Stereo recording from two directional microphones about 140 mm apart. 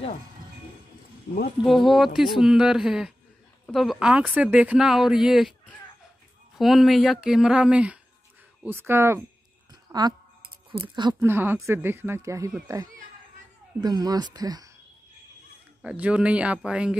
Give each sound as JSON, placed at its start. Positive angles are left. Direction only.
{"t": 1.6, "sound": "speech", "side_deg": 0}
{"t": 6.6, "sound": "speech", "side_deg": 0}
{"t": 9.7, "sound": "a sound", "side_deg": -30}
{"t": 10.7, "sound": "speech", "side_deg": -35}
{"t": 11.1, "sound": "speech", "side_deg": -15}
{"t": 15.8, "sound": "speech", "side_deg": -10}